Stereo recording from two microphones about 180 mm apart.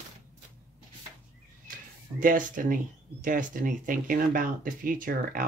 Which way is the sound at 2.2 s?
50° right (ahead or behind).